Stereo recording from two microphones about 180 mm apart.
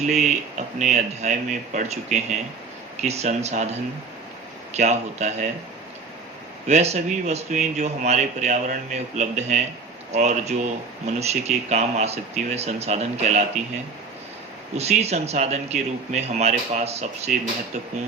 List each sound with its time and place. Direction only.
0.0 s speech: 40° right (ahead or behind)
6.7 s speech: 35° right (ahead or behind)
14.8 s speech: 35° right (ahead or behind)